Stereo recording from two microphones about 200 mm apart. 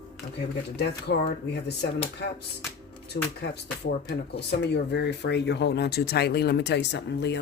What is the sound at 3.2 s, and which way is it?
Speech, 50° left (ahead or behind).